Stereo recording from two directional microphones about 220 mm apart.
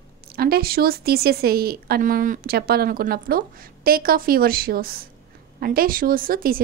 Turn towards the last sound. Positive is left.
turn(degrees=-40)  # may be behind; listen again after turning